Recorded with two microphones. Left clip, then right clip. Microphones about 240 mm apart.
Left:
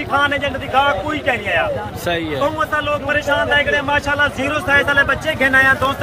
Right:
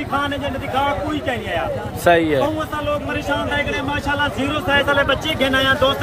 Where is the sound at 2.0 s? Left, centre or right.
Centre.